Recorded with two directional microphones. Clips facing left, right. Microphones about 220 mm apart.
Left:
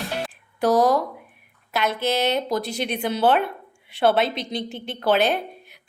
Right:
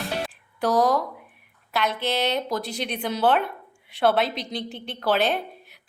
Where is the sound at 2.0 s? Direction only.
5° left (ahead or behind).